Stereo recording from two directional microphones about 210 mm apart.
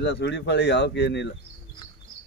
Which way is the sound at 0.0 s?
55° left (ahead or behind).